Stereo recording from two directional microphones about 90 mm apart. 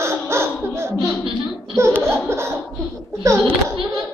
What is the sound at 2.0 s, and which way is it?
Laughter, 30° right (ahead or behind).